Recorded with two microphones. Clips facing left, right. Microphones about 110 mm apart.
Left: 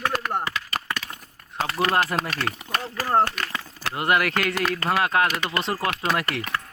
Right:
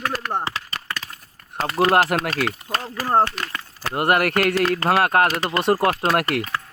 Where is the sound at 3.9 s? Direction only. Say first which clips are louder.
Right 3 dB; 55° right (ahead or behind).